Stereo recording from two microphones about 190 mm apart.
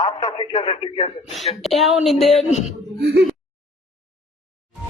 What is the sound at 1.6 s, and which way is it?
Speech, centre (ahead or behind).